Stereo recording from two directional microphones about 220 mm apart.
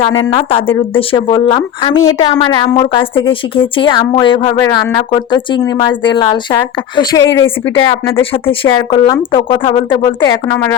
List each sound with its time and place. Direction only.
0.2 s speech: 25° left (ahead or behind)